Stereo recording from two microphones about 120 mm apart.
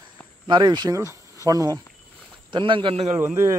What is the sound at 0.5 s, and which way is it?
Speech, 35° right (ahead or behind).